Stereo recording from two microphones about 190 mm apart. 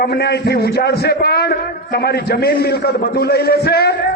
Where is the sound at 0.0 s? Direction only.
55° left (ahead or behind).